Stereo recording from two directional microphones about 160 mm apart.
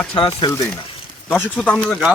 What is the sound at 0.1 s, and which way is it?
Speech, 35° left (ahead or behind).